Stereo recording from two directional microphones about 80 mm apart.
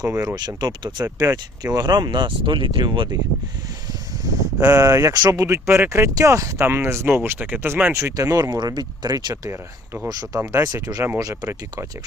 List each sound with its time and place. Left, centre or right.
0.0 s speech: right
0.3 s speech: right
4.6 s speech: right
7.9 s speech: right
8.4 s speech: right
9.3 s speech: right